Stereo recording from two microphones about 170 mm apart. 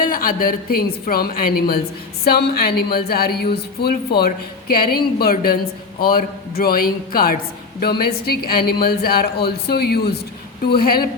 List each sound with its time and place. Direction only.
0.0 s a woman's voice: 55° left (ahead or behind)
4.2 s a woman's voice: 60° left (ahead or behind)